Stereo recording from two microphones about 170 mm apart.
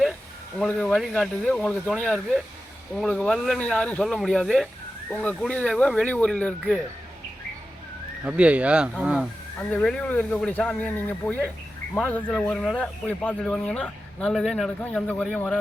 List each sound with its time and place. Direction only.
0.6 s speech: 5° left (ahead or behind)
8.2 s speech: 10° right (ahead or behind)
9.6 s speech: 5° left (ahead or behind)